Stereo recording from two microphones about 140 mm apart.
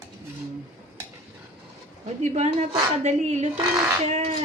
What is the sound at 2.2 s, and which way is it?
A woman's voice, 55° right (ahead or behind).